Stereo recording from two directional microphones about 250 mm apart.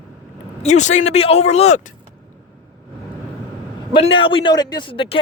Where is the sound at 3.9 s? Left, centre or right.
Left.